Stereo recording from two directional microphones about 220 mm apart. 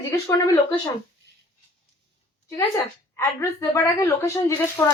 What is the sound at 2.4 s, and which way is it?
A woman's voice, 15° left (ahead or behind).